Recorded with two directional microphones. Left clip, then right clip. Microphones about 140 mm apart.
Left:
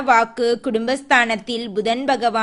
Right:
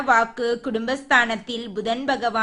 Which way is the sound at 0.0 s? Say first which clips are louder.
Left 3 dB; 35° left (ahead or behind).